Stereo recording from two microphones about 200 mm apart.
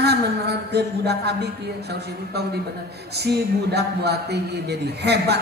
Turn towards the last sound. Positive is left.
turn(degrees=-55)  # may be behind; listen again after turning